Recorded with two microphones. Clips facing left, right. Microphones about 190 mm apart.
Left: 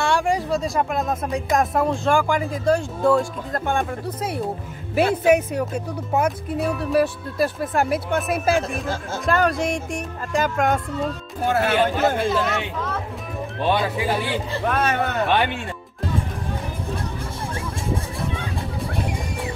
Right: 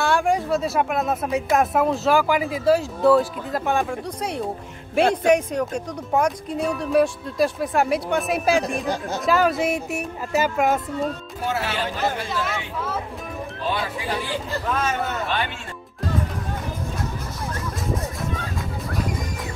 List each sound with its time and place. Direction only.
0.0 s speech: centre (ahead or behind)
11.4 s speech: 55° left (ahead or behind)
12.0 s speech: centre (ahead or behind)
14.7 s speech: 65° left (ahead or behind)